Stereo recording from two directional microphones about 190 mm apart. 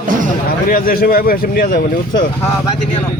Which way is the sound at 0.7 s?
50° left (ahead or behind).